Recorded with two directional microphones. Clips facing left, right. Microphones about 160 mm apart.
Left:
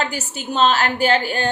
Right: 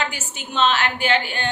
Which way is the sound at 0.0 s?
40° left (ahead or behind).